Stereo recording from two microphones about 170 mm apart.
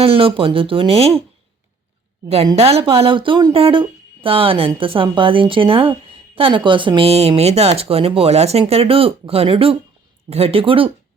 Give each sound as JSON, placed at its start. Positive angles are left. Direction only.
{"t": 0.0, "sound": "speech", "side_deg": -35}
{"t": 2.6, "sound": "speech", "side_deg": -35}